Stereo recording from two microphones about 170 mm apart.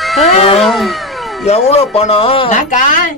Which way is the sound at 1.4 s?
40° left (ahead or behind).